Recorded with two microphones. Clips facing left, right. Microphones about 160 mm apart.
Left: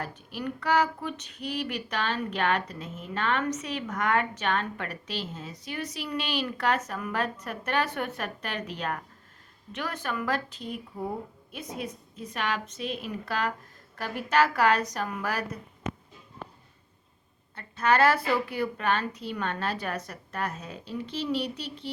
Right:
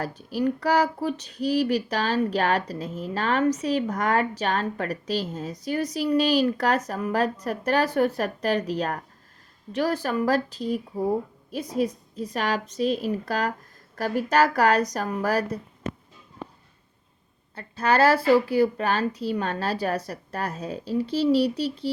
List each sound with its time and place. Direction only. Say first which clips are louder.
0.0 s speech: right 9 dB; 35° right (ahead or behind)
17.5 s speech: right 2 dB; 35° right (ahead or behind)